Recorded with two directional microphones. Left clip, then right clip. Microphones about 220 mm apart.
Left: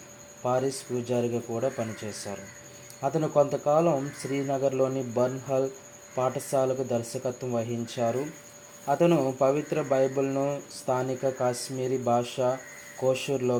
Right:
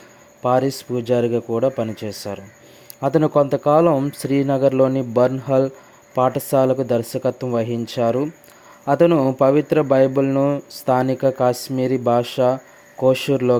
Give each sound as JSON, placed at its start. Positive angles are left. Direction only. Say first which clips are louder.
{"t": 0.4, "sound": "speech", "louder": "right 9 dB", "side_deg": -50}